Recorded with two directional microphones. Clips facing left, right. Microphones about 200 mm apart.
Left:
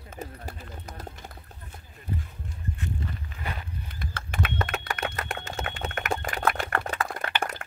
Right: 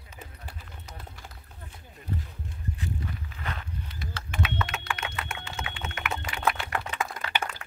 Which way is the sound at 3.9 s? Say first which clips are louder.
Left 1 dB; 55° left (ahead or behind).